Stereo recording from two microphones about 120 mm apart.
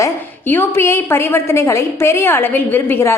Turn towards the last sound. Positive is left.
turn(degrees=20)  # may be behind; listen again after turning